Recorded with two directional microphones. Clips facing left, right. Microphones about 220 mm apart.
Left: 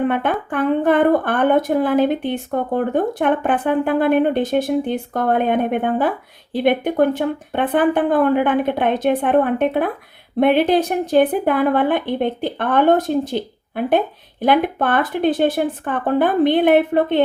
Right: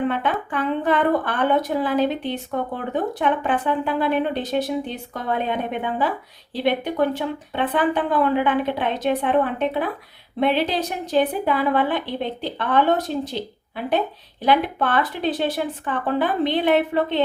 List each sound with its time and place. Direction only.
0.1 s speech: 50° left (ahead or behind)